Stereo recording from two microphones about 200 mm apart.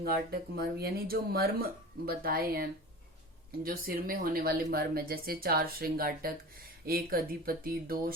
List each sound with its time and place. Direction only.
0.0 s speech: 50° right (ahead or behind)